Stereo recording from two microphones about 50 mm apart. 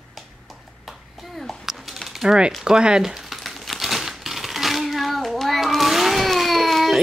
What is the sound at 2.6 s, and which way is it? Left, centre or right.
Crumpling, centre.